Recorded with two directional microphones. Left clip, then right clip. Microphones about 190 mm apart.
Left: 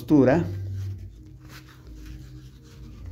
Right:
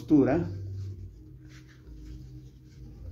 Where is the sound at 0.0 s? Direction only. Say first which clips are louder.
Left 5 dB; 30° left (ahead or behind).